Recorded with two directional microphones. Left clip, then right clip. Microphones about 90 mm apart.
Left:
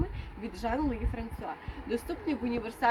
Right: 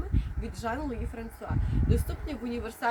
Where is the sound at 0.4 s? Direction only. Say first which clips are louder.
Left 2 dB; 30° right (ahead or behind).